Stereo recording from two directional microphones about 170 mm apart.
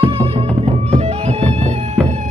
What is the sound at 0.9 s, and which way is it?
Music, 40° right (ahead or behind).